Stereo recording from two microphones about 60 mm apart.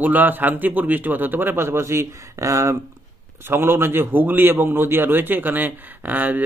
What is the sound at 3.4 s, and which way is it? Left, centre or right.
A man's voice, right.